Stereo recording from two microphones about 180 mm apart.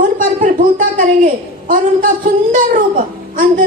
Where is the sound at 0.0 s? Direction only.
50° right (ahead or behind).